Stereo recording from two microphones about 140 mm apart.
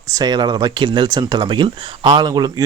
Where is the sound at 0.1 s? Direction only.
30° right (ahead or behind).